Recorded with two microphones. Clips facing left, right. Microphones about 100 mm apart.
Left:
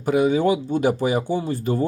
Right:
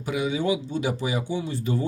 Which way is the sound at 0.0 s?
45° left (ahead or behind).